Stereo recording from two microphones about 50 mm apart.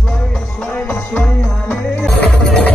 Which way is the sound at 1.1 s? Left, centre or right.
Left.